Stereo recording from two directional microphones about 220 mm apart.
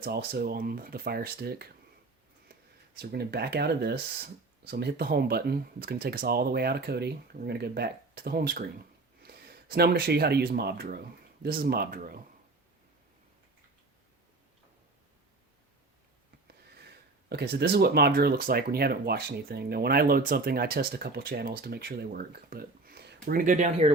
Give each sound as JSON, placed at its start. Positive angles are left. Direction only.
{"t": 0.0, "sound": "speech", "side_deg": -45}
{"t": 3.0, "sound": "speech", "side_deg": -45}
{"t": 17.2, "sound": "speech", "side_deg": -50}